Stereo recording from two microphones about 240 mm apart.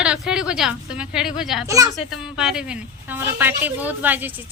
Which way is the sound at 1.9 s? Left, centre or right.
Centre.